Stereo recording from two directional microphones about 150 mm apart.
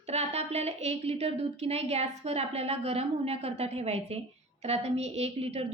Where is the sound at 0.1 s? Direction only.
45° right (ahead or behind).